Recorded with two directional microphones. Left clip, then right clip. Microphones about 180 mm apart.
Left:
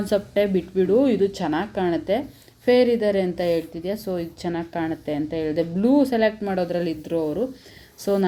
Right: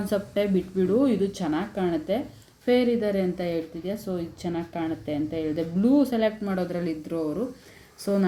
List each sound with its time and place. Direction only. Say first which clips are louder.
0.0 s speech: left 5 dB; 15° left (ahead or behind)